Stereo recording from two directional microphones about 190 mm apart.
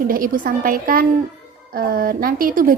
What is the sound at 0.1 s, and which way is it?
A woman's voice, 45° right (ahead or behind).